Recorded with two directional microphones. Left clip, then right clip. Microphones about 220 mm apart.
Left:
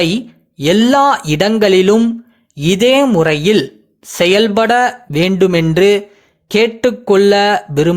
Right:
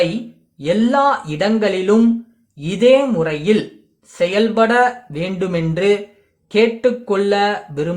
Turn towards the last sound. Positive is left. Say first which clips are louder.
# left 7 dB
turn(degrees=40)  # may be behind; listen again after turning